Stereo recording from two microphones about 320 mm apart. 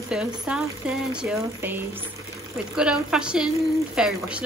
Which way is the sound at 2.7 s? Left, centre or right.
Centre.